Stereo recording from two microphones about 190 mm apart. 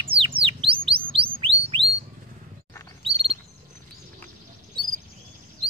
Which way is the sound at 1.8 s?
65° right (ahead or behind).